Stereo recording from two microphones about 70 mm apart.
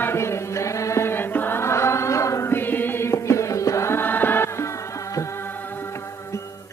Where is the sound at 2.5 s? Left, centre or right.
Left.